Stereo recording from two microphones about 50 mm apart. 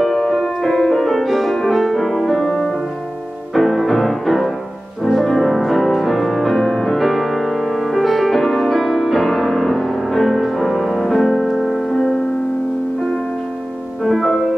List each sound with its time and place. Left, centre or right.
0.0 s music: centre
3.5 s music: centre
14.0 s music: centre